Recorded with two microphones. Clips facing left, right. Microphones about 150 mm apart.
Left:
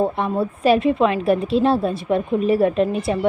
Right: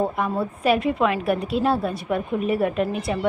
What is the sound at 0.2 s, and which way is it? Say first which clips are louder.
A woman's voice: left 3 dB; 30° left (ahead or behind).